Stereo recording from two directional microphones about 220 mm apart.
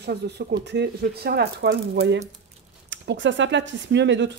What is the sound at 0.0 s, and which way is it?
Speech, 45° right (ahead or behind).